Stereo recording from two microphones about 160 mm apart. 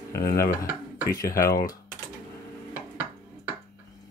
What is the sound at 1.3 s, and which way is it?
Speech, 65° left (ahead or behind).